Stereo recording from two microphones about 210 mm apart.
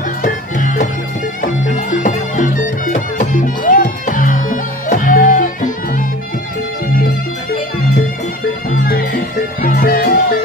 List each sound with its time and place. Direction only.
0.2 s music: 40° left (ahead or behind)
8.7 s music: 45° left (ahead or behind)